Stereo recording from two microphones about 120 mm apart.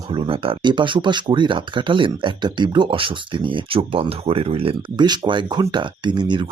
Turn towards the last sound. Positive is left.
turn(degrees=-40)  # may be behind; listen again after turning